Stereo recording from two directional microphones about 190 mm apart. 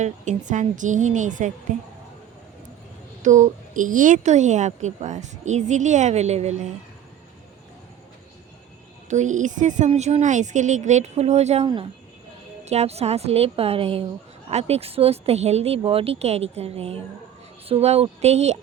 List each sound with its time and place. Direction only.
0.0 s speech: 40° right (ahead or behind)
3.2 s speech: 40° right (ahead or behind)
9.0 s speech: 40° right (ahead or behind)